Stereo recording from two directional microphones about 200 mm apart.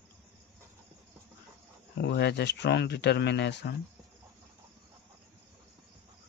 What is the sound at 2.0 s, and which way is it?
Speech, 55° left (ahead or behind).